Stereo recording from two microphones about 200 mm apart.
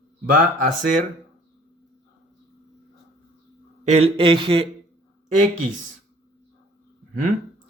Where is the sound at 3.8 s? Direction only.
30° right (ahead or behind).